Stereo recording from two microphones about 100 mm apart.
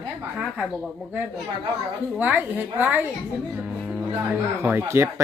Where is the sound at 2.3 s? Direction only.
20° right (ahead or behind).